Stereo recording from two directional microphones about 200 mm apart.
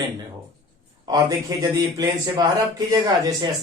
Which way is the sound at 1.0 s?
15° right (ahead or behind).